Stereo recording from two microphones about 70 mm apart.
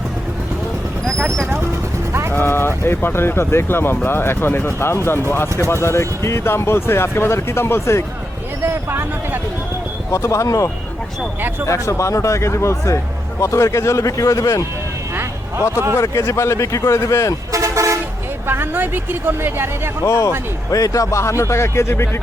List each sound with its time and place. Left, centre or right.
2.3 s speech: left
8.6 s speech: right
10.1 s a man's voice: left
11.7 s a man's voice: left
15.1 s vehicle: right
16.0 s a man's voice: left
17.5 s toot: right
18.4 s speech: right
20.1 s a man's voice: left